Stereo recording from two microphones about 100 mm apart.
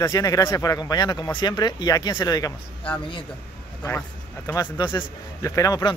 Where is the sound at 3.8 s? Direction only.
30° left (ahead or behind).